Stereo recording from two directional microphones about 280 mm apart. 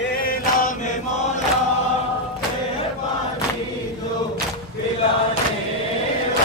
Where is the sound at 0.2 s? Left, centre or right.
Left.